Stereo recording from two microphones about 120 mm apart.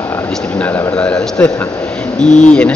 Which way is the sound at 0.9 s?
10° left (ahead or behind).